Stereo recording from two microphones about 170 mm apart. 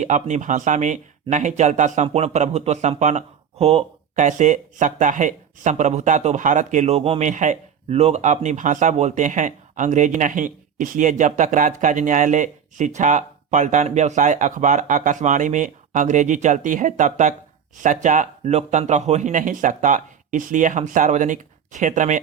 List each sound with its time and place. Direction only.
0.0 s speech: 45° right (ahead or behind)